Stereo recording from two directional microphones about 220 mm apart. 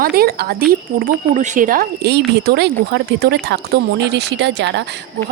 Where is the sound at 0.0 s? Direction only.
45° right (ahead or behind).